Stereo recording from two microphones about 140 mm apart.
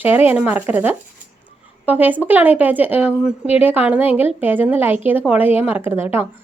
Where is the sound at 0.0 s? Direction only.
15° right (ahead or behind).